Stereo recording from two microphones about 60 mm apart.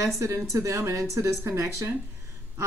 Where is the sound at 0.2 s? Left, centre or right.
Right.